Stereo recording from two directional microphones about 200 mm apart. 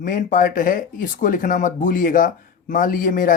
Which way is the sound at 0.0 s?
40° left (ahead or behind).